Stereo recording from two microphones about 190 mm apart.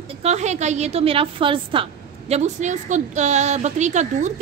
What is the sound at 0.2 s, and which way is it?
A woman's voice, 35° right (ahead or behind).